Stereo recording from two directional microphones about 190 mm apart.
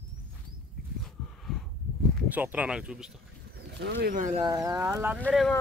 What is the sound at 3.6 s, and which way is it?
Speech, 60° right (ahead or behind).